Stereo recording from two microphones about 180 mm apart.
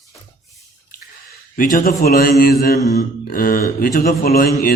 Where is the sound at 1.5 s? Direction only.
50° left (ahead or behind).